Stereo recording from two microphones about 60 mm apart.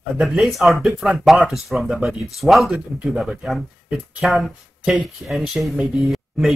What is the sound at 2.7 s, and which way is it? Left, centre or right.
Speech, centre.